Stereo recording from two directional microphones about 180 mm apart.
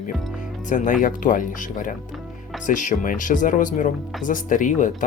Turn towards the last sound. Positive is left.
turn(degrees=45)  # may be behind; listen again after turning